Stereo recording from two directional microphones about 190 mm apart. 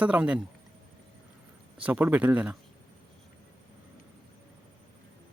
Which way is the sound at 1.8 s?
10° right (ahead or behind).